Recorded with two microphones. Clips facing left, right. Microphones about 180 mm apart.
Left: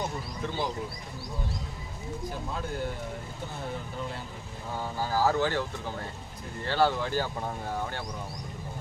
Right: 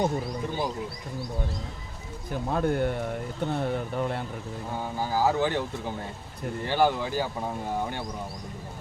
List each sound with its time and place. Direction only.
2.5 s speech: 60° right (ahead or behind)
4.9 s speech: 15° right (ahead or behind)